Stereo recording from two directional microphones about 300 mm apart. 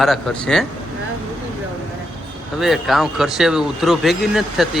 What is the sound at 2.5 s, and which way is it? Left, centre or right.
Speech, centre.